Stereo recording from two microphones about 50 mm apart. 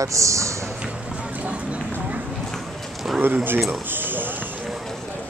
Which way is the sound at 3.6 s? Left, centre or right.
Right.